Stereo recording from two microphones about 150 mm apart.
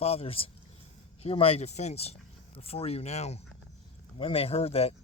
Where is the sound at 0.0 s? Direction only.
40° left (ahead or behind).